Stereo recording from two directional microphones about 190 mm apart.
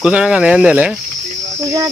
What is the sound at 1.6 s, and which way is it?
Cricket, 15° right (ahead or behind).